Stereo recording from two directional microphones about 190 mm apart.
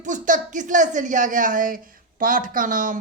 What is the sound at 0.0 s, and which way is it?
Speech, 40° right (ahead or behind).